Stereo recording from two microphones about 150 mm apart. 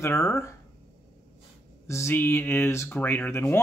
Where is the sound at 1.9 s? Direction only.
15° left (ahead or behind).